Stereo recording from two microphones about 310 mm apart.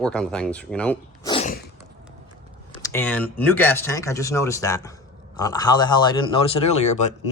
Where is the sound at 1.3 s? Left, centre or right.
Left.